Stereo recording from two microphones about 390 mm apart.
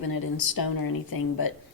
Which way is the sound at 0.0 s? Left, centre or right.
Left.